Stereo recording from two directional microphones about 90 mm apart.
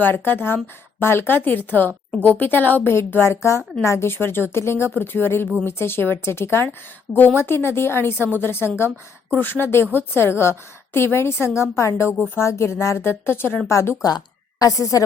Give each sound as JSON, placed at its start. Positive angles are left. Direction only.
{"t": 0.0, "sound": "a woman's voice", "side_deg": 25}